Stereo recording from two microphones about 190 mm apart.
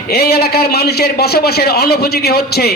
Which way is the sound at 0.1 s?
55° left (ahead or behind).